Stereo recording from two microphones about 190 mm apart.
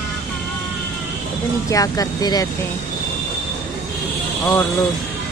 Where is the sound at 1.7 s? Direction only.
20° left (ahead or behind).